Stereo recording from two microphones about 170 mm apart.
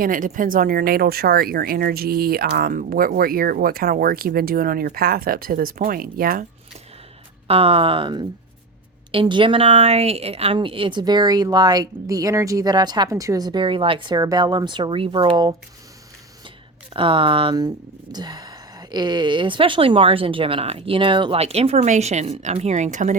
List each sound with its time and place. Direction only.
0.0 s speech: 50° right (ahead or behind)
7.4 s speech: 35° right (ahead or behind)
16.9 s speech: 30° right (ahead or behind); by 23.1 s 45° right (ahead or behind)